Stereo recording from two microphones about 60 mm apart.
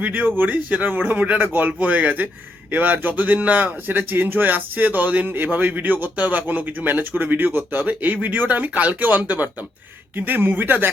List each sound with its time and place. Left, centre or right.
0.0 s speech: right